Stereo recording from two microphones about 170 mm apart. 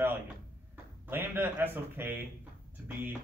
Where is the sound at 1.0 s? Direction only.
10° right (ahead or behind).